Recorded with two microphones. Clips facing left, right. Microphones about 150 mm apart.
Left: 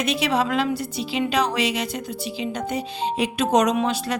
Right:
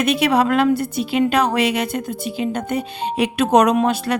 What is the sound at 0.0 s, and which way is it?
A woman's voice, 55° right (ahead or behind).